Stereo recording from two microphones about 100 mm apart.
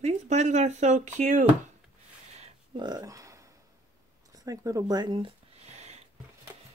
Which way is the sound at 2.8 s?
40° right (ahead or behind).